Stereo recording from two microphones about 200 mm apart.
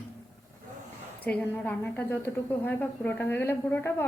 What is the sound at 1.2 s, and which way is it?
A woman's voice, 10° left (ahead or behind).